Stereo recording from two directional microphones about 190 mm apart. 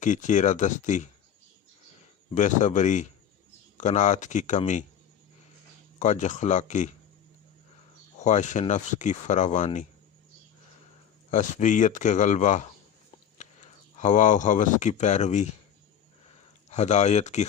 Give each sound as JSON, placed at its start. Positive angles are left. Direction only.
{"t": 0.0, "sound": "speech", "side_deg": 40}
{"t": 2.3, "sound": "speech", "side_deg": 40}
{"t": 6.0, "sound": "speech", "side_deg": 40}
{"t": 8.2, "sound": "speech", "side_deg": 40}
{"t": 11.3, "sound": "speech", "side_deg": 40}
{"t": 14.0, "sound": "speech", "side_deg": 40}
{"t": 16.6, "sound": "speech", "side_deg": 35}